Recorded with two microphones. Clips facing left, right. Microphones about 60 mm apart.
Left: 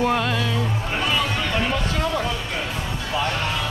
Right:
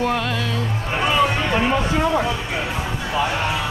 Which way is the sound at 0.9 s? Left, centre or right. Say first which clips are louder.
Right 6 dB; centre.